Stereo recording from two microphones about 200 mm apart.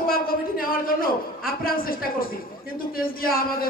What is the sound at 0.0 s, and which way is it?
A man's voice, 45° left (ahead or behind).